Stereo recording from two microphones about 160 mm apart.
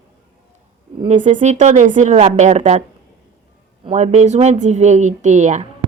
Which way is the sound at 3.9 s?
45° right (ahead or behind).